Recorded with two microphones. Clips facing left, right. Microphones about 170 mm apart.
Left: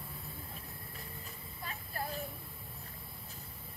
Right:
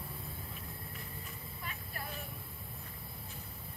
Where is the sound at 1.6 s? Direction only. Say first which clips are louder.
Left 5 dB; 35° left (ahead or behind).